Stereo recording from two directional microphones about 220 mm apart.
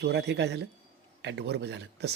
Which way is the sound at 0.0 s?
50° right (ahead or behind).